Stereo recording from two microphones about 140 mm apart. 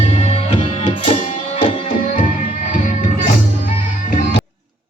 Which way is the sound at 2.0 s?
70° left (ahead or behind).